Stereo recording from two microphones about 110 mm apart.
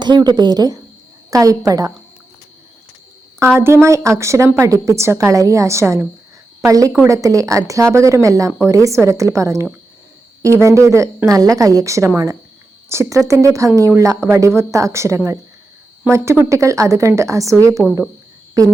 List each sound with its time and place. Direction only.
0.0 s speech: 40° right (ahead or behind)
3.4 s speech: 25° right (ahead or behind)